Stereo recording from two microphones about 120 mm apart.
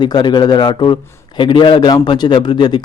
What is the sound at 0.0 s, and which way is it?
A man's voice, 40° left (ahead or behind).